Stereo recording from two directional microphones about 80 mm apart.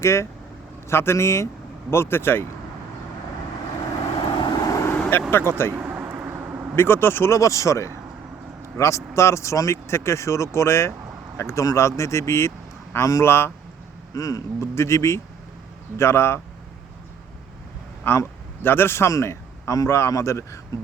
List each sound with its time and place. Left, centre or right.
0.0 s speech: left
4.4 s vehicle: left
4.7 s vehicle: left
4.9 s vehicle: left
5.3 s speech: left
5.8 s a sound: centre
6.7 s a man's voice: left
14.1 s speech: left
18.0 s a man's voice: left